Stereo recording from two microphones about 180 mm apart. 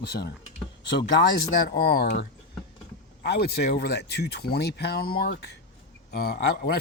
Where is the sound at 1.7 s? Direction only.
60° left (ahead or behind).